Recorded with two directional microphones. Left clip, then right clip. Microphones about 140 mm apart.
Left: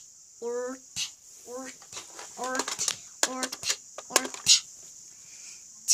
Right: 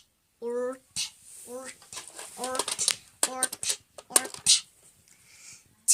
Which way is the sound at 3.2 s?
25° left (ahead or behind).